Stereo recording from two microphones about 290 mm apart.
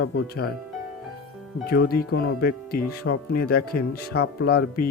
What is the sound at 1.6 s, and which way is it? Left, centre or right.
Speech, left.